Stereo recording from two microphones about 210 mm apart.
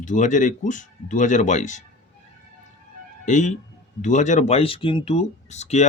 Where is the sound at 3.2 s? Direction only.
35° left (ahead or behind).